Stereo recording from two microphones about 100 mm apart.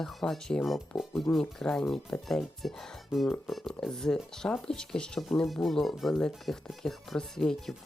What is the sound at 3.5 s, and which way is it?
Speech, 5° left (ahead or behind).